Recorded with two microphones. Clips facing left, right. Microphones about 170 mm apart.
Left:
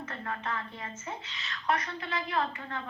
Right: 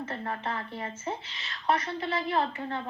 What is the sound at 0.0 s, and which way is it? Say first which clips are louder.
A woman's voice: right 3 dB; 30° right (ahead or behind).